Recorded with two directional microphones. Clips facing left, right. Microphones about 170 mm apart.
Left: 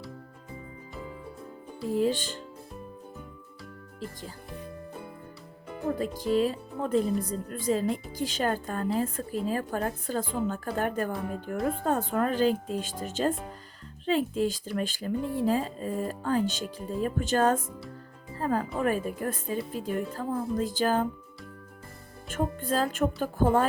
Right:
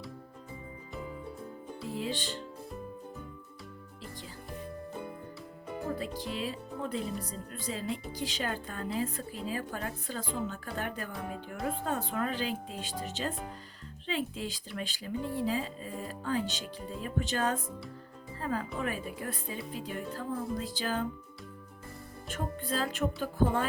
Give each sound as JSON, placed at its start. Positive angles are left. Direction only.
{"t": 1.9, "sound": "speech", "side_deg": 45}
{"t": 6.0, "sound": "speech", "side_deg": 45}
{"t": 18.3, "sound": "music", "side_deg": 45}
{"t": 18.8, "sound": "speech", "side_deg": 45}
{"t": 22.3, "sound": "speech", "side_deg": 45}